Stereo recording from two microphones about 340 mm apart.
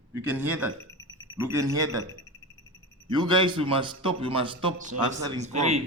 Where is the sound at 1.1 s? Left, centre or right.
Centre.